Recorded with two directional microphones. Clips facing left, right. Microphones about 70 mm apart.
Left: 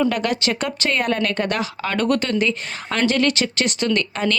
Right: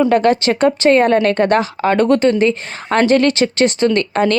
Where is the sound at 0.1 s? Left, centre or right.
Right.